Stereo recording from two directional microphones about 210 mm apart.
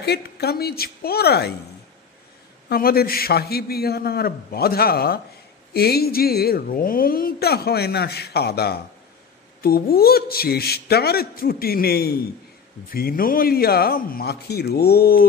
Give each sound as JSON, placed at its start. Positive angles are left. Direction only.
{"t": 0.0, "sound": "a woman's voice", "side_deg": 50}
{"t": 2.7, "sound": "a woman's voice", "side_deg": 45}